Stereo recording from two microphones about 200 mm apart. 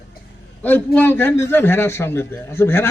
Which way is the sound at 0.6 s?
10° left (ahead or behind).